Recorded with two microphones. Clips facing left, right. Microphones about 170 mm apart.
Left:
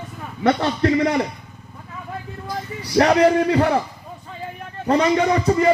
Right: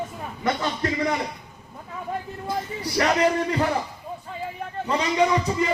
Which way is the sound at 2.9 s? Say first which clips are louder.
Left 7 dB; 60° left (ahead or behind).